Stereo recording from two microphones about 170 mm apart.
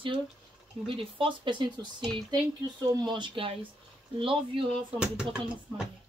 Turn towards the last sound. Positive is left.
turn(degrees=-5)  # may be behind; listen again after turning